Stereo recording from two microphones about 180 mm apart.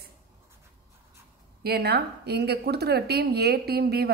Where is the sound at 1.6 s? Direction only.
60° right (ahead or behind).